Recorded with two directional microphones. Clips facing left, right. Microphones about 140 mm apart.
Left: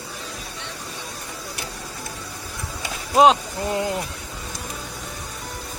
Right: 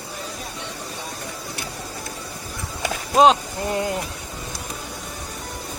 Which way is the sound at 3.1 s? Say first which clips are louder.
Even; 5° left (ahead or behind).